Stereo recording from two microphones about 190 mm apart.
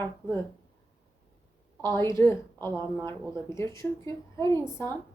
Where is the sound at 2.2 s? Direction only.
15° left (ahead or behind).